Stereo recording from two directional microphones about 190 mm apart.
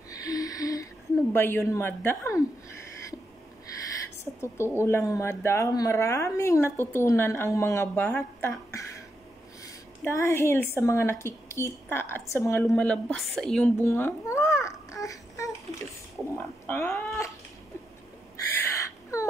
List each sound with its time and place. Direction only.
0.1 s gasp: 20° left (ahead or behind)
1.3 s speech: 10° left (ahead or behind)
4.2 s a woman's voice: 15° left (ahead or behind)
10.0 s speech: 15° left (ahead or behind)
13.8 s babbling: 15° left (ahead or behind)
16.6 s speech: 15° left (ahead or behind)
18.5 s a sound: 15° left (ahead or behind)